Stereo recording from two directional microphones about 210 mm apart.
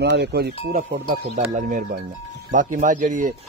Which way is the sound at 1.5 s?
40° right (ahead or behind).